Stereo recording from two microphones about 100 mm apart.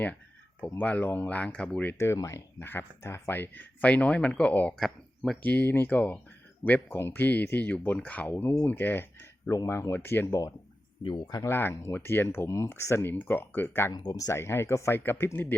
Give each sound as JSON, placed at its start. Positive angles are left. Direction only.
{"t": 0.6, "sound": "speech", "side_deg": 15}
{"t": 4.8, "sound": "speech", "side_deg": 0}
{"t": 5.4, "sound": "speech", "side_deg": 15}
{"t": 11.0, "sound": "speech", "side_deg": 45}
{"t": 11.4, "sound": "speech", "side_deg": 25}
{"t": 13.9, "sound": "speech", "side_deg": 40}
{"t": 14.3, "sound": "speech", "side_deg": 25}